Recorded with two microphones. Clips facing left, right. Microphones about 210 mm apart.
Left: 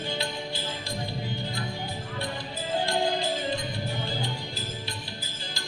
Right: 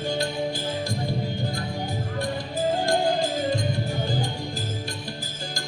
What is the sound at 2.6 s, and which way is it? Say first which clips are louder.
Music: right 5 dB; 45° right (ahead or behind).